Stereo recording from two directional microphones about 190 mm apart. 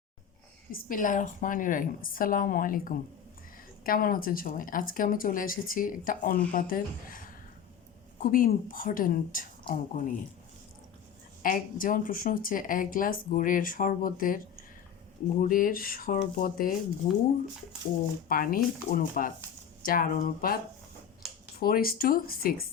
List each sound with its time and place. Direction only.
0.7 s a woman's voice: 50° left (ahead or behind)
11.4 s speech: 45° left (ahead or behind)
18.3 s speech: 50° left (ahead or behind)
21.6 s speech: 50° left (ahead or behind)